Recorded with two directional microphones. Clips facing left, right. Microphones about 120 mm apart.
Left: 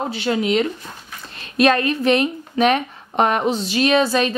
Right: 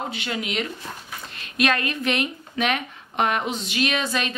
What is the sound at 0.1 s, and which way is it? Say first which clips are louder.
A woman's voice: left 9 dB; 35° left (ahead or behind).